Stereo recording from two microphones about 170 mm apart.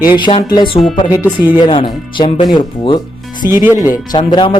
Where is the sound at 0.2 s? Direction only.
30° left (ahead or behind).